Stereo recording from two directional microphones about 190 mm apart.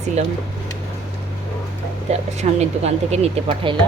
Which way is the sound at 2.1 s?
35° right (ahead or behind).